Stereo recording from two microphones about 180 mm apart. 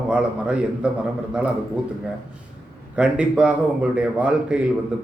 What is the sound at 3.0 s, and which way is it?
A man's voice, 5° right (ahead or behind).